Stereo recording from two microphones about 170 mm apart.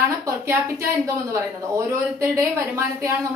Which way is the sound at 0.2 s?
15° right (ahead or behind).